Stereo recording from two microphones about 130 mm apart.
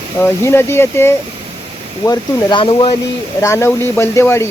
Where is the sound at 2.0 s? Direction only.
35° left (ahead or behind).